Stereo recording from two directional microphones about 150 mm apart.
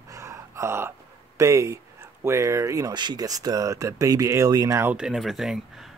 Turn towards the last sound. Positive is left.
turn(degrees=0)  # may be behind; listen again after turning